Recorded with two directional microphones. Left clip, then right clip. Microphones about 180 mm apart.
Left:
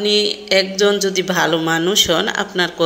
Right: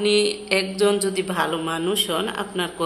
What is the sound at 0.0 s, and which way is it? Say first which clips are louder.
A woman's voice: left 3 dB; 10° left (ahead or behind).